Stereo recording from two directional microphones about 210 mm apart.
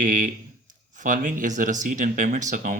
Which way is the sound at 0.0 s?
40° right (ahead or behind).